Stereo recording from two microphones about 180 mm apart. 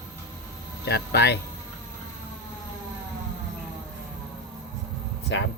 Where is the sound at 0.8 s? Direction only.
65° left (ahead or behind).